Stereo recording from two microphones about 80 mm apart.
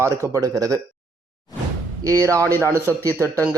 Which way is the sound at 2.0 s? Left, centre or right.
Right.